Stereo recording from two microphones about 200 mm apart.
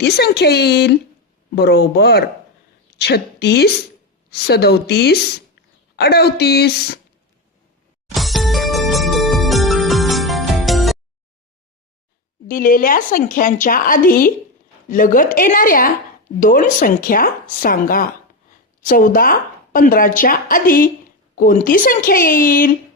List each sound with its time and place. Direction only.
0.0 s speech: 55° left (ahead or behind)
8.1 s music: centre (ahead or behind)
12.5 s speech: 45° left (ahead or behind)